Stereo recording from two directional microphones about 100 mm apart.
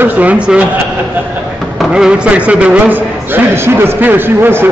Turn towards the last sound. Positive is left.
turn(degrees=-20)  # may be behind; listen again after turning